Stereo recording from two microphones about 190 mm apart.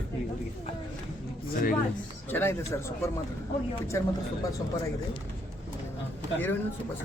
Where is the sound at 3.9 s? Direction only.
15° left (ahead or behind).